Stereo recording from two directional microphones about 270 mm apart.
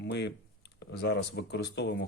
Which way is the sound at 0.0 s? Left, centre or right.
Left.